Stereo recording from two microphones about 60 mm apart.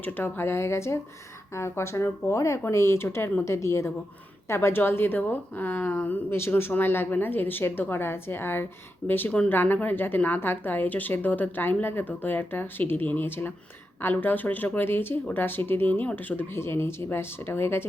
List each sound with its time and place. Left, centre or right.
0.0 s a woman's voice: left
0.4 s a woman's voice: left